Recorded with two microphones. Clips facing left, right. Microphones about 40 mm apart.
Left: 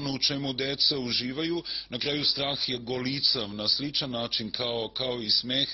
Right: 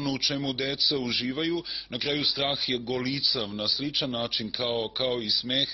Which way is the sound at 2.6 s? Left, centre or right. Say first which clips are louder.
Right 3 dB; centre.